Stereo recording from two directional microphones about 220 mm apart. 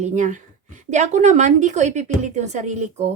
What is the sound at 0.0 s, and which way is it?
A woman's voice, 35° right (ahead or behind).